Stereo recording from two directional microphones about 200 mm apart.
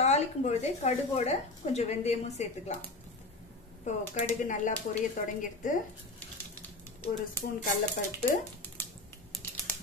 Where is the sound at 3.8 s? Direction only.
40° left (ahead or behind).